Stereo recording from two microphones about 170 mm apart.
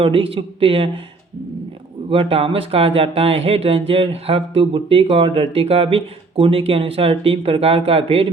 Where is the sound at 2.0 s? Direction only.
35° right (ahead or behind).